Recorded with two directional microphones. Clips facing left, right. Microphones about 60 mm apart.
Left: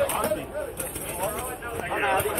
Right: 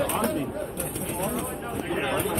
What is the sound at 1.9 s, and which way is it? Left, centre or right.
Speech, left.